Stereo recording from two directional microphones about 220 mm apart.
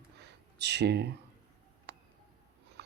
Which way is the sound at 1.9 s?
50° right (ahead or behind).